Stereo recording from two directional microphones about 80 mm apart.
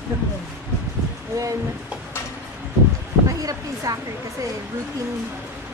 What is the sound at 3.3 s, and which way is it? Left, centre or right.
Speech, right.